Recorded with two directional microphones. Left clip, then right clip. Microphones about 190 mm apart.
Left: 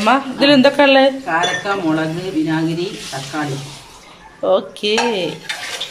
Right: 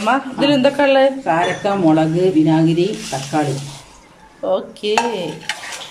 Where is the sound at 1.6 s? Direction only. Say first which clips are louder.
Right 3 dB; 50° right (ahead or behind).